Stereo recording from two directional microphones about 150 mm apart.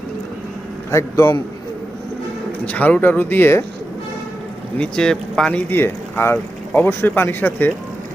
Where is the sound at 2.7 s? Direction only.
10° left (ahead or behind).